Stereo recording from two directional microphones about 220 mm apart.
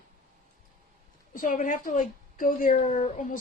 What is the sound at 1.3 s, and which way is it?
A woman's voice, 40° left (ahead or behind).